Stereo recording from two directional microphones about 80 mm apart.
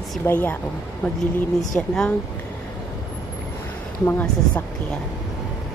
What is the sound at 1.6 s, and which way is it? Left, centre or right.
Speech, centre.